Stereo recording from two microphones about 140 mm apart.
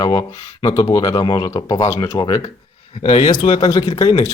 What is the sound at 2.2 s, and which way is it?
Speech, 30° left (ahead or behind).